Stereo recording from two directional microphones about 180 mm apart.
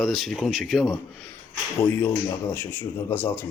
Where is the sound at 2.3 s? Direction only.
15° left (ahead or behind).